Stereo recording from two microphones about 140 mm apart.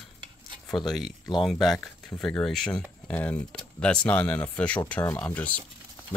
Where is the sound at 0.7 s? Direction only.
Centre (ahead or behind).